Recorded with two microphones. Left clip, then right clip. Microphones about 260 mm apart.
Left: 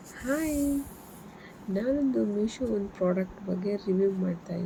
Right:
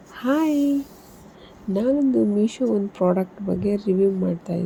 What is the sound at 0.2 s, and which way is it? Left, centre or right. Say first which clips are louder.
Speech: right 9 dB; right.